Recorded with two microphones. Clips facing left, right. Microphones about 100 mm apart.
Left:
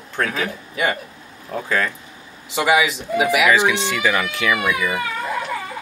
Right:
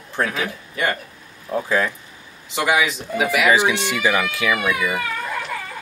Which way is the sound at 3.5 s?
20° right (ahead or behind).